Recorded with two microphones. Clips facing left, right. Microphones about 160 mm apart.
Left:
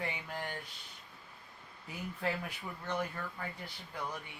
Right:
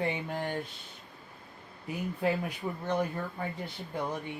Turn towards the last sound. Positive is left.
turn(degrees=-25)  # may be behind; listen again after turning